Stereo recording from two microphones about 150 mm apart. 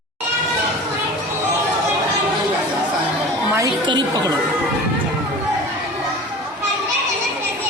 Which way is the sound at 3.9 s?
30° right (ahead or behind).